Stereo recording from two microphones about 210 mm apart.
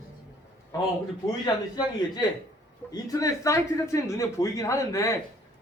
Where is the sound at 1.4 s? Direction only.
20° left (ahead or behind).